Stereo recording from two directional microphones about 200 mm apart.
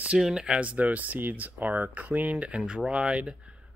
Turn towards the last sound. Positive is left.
turn(degrees=-5)  # may be behind; listen again after turning